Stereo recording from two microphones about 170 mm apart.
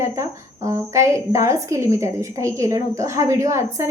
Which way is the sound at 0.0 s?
15° right (ahead or behind).